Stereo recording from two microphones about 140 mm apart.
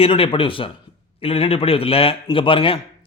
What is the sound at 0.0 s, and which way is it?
A man's voice, 40° left (ahead or behind).